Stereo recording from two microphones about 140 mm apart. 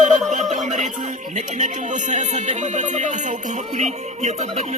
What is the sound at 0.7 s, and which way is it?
Speech, 60° right (ahead or behind).